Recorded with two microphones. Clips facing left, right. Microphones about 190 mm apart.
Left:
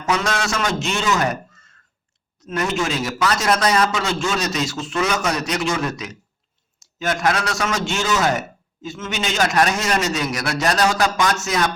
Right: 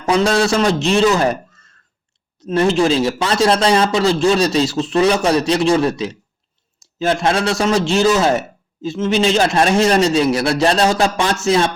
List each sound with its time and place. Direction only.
0.0 s a man's voice: 30° right (ahead or behind)
2.4 s a man's voice: 30° right (ahead or behind)